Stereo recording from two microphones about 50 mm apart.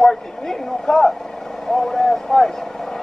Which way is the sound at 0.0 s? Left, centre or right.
Centre.